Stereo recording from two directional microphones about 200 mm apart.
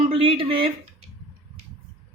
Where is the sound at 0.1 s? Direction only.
25° right (ahead or behind).